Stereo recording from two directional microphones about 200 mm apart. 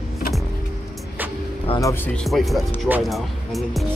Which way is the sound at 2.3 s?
5° right (ahead or behind).